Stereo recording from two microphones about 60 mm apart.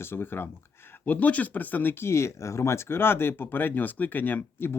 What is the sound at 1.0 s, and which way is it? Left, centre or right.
Speech, left.